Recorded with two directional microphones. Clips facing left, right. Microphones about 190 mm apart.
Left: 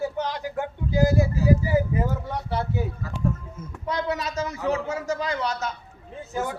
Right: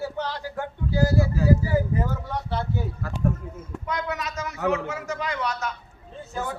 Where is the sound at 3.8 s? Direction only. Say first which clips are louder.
Left 3 dB; 30° left (ahead or behind).